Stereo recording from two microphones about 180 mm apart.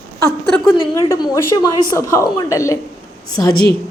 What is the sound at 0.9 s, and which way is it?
A woman's voice, 20° left (ahead or behind).